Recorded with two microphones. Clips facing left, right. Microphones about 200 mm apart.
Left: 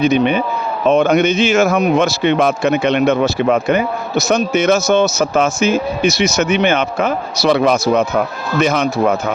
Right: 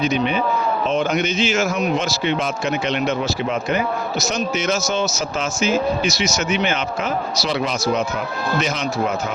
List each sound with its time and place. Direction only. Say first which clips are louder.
0.0 s a man's voice: left 6 dB; 60° left (ahead or behind)